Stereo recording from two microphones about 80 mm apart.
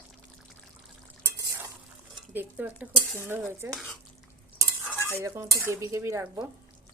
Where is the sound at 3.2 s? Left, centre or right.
Right.